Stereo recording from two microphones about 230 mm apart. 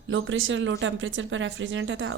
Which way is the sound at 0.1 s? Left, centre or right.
Right.